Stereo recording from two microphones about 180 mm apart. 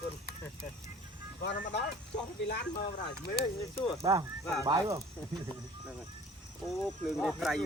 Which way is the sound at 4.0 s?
15° right (ahead or behind).